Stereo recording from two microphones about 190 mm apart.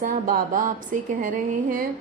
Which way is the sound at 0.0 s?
45° right (ahead or behind).